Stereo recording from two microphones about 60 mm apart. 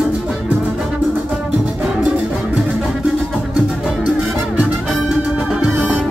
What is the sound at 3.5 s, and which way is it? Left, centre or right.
Music, centre.